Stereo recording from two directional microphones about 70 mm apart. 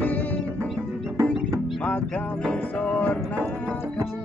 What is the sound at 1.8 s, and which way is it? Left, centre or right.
Music, left.